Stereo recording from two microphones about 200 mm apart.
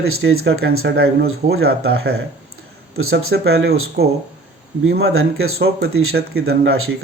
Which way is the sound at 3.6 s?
50° right (ahead or behind).